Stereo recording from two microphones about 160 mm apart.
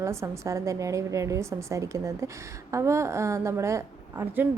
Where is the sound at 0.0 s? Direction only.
20° right (ahead or behind).